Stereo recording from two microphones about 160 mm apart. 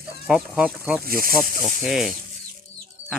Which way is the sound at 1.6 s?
Centre (ahead or behind).